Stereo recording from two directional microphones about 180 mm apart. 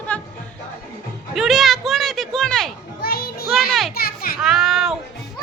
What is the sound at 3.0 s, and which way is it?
Music, 55° left (ahead or behind).